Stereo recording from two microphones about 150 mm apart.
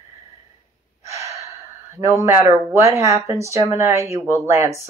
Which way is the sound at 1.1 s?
20° right (ahead or behind).